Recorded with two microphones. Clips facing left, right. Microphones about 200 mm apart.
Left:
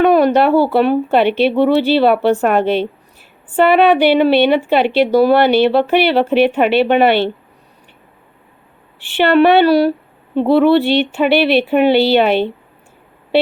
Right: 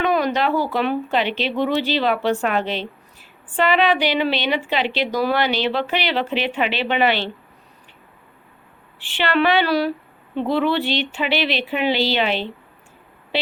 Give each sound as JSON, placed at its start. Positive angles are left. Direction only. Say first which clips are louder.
{"t": 0.0, "sound": "a woman's voice", "louder": "left 9 dB", "side_deg": 50}
{"t": 9.1, "sound": "a woman's voice", "louder": "left 8 dB", "side_deg": 55}